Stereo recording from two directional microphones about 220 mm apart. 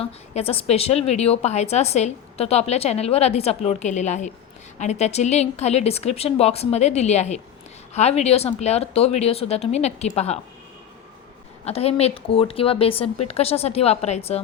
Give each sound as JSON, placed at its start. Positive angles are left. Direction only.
{"t": 0.0, "sound": "a woman's voice", "side_deg": 25}
{"t": 11.6, "sound": "a woman's voice", "side_deg": 25}